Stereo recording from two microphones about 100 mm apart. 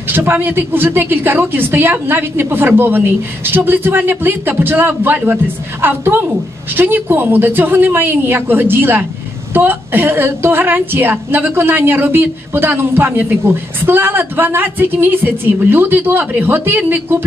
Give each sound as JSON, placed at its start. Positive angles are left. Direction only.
{"t": 0.1, "sound": "a woman's voice", "side_deg": -20}